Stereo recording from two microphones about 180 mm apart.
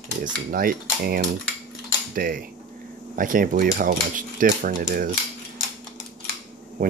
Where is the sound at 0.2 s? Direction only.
55° right (ahead or behind).